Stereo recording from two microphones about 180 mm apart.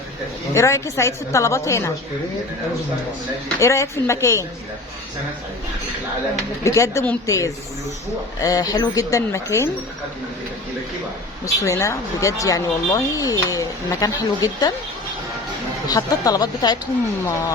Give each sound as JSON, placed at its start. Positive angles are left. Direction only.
{"t": 0.5, "sound": "a woman's voice", "side_deg": 15}
{"t": 3.6, "sound": "a woman's voice", "side_deg": 15}
{"t": 6.7, "sound": "a woman's voice", "side_deg": 15}
{"t": 11.4, "sound": "speech", "side_deg": 15}
{"t": 15.9, "sound": "speech", "side_deg": 20}